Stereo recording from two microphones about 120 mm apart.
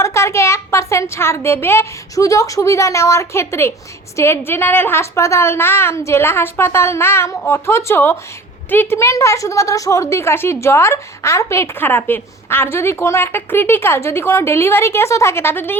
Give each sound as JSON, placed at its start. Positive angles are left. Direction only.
{"t": 0.0, "sound": "a woman's voice", "side_deg": 25}